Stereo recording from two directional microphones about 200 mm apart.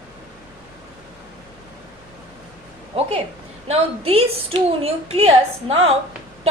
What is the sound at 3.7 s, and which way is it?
A woman's voice, 30° right (ahead or behind).